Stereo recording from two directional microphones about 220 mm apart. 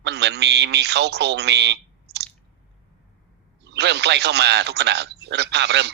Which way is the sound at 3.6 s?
50° right (ahead or behind).